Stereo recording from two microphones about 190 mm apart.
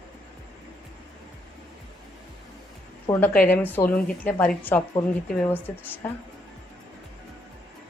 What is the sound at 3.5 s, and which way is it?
A woman's voice, 10° left (ahead or behind).